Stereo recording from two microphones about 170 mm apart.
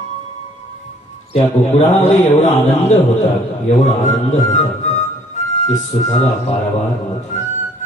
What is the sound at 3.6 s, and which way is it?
A man's voice, 45° left (ahead or behind).